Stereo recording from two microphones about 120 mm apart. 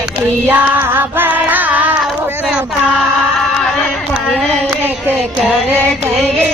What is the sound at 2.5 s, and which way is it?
Child singing, 5° right (ahead or behind).